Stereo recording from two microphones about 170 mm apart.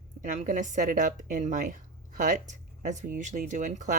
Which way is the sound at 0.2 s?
45° right (ahead or behind).